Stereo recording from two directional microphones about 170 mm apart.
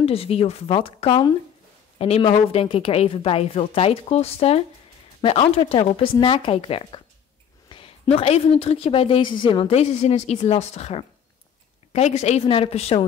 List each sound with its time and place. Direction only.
0.0 s a woman's voice: 35° left (ahead or behind)